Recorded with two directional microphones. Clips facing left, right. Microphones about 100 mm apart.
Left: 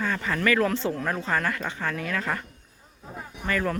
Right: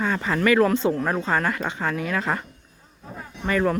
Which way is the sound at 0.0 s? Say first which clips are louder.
Right 4 dB; 25° right (ahead or behind).